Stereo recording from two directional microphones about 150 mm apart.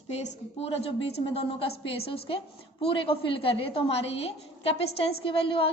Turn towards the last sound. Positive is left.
turn(degrees=35)  # may be behind; listen again after turning